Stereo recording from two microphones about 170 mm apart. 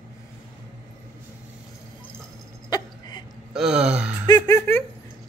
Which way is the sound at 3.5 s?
5° right (ahead or behind).